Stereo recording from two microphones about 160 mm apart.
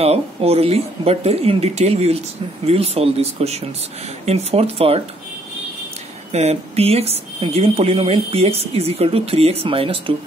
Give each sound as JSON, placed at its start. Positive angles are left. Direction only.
{"t": 0.0, "sound": "speech", "side_deg": -40}
{"t": 6.3, "sound": "speech", "side_deg": -40}